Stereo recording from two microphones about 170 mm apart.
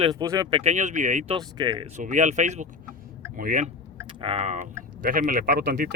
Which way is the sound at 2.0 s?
45° right (ahead or behind).